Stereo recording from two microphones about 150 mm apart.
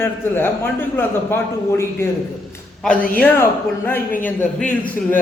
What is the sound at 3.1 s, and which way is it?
A man's voice, 10° left (ahead or behind).